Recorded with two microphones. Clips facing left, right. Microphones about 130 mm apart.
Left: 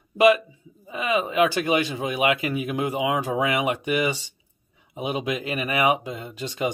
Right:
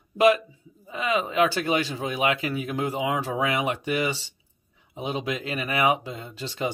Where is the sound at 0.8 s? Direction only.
10° left (ahead or behind).